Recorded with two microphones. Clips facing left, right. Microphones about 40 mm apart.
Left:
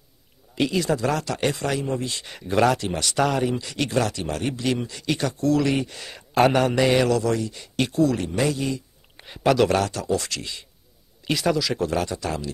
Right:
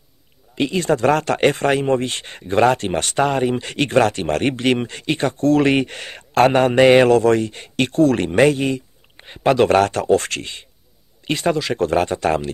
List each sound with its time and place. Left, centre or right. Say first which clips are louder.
0.6 s speech: right 2 dB; right
0.8 s speech: right 7 dB; right
9.1 s a sound: right 2 dB; centre
9.4 s speech: right 5 dB; right